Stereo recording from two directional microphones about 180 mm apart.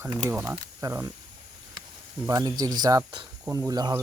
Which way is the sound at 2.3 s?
20° right (ahead or behind).